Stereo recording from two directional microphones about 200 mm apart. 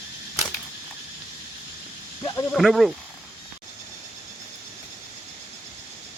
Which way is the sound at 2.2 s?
15° left (ahead or behind).